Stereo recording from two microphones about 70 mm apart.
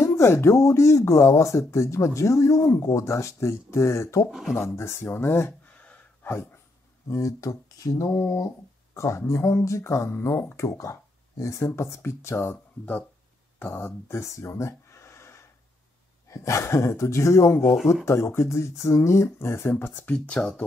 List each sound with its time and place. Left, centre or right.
0.0 s speech: left
4.3 s speech: centre
4.6 s speech: left
6.2 s dog: left
7.1 s speech: left
8.9 s speech: left
20.1 s speech: centre